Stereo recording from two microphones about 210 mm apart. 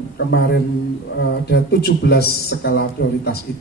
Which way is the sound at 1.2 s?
50° left (ahead or behind).